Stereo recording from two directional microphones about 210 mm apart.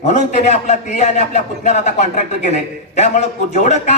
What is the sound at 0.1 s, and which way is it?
A man's voice, 35° left (ahead or behind).